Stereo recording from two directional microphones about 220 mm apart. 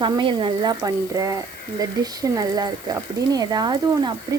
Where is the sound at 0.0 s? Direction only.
20° right (ahead or behind).